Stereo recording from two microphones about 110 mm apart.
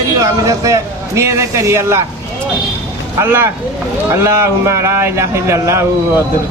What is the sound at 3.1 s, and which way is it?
A man's voice, 20° right (ahead or behind).